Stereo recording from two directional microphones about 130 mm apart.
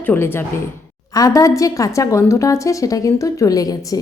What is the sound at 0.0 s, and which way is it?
A woman's voice, 15° left (ahead or behind).